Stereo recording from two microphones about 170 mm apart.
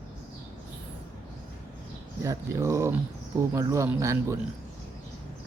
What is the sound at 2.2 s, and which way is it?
Speech, 20° right (ahead or behind).